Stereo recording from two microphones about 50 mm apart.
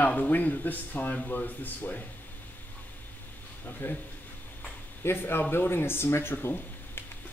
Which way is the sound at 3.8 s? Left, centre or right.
Left.